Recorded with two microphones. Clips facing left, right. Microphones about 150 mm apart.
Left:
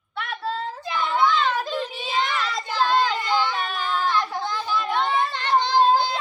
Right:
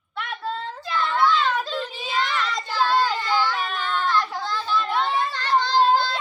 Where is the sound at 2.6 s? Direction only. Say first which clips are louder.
Even; 15° left (ahead or behind).